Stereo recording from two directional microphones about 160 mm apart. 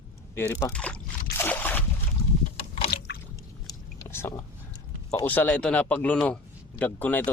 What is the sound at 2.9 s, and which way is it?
Squish, 85° left.